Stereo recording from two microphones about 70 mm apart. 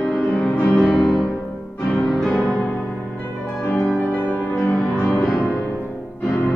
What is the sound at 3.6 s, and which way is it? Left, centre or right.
Music, centre.